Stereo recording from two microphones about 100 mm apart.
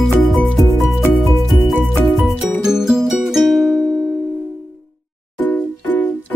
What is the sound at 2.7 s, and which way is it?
Music, 5° right (ahead or behind).